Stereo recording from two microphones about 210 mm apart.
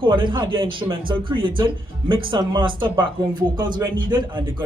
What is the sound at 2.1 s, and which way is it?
Speech, 25° right (ahead or behind).